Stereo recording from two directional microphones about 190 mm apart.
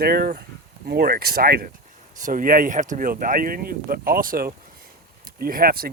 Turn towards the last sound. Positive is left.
turn(degrees=-50)  # may be behind; listen again after turning